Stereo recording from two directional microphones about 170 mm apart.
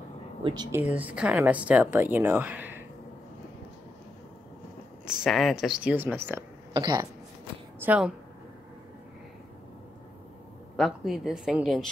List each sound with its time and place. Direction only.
0.4 s speech: 30° right (ahead or behind)
0.7 s a woman's voice: 10° right (ahead or behind)
5.0 s speech: centre (ahead or behind)
6.7 s speech: 25° right (ahead or behind)
7.8 s speech: 10° right (ahead or behind)
10.8 s speech: centre (ahead or behind)